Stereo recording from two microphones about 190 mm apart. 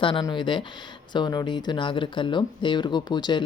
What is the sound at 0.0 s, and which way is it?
Speech, 25° left (ahead or behind).